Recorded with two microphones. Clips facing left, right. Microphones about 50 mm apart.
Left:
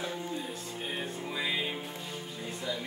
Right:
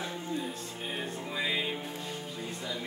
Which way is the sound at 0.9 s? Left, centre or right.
Centre.